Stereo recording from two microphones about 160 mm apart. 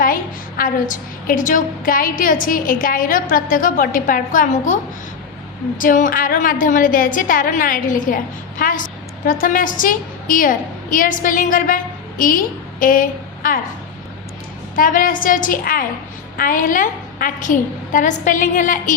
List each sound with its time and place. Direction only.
0.0 s a woman's voice: 60° left (ahead or behind)
14.8 s a woman's voice: 60° left (ahead or behind)